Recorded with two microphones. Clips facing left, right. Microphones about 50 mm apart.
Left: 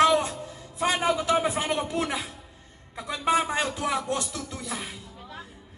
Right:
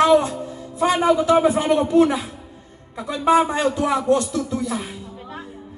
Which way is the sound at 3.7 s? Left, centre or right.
Centre.